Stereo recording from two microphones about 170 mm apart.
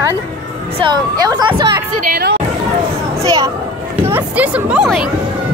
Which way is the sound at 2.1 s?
65° right (ahead or behind).